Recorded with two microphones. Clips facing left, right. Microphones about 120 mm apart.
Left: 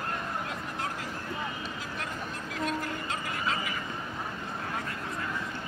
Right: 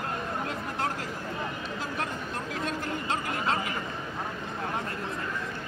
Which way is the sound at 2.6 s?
30° right (ahead or behind).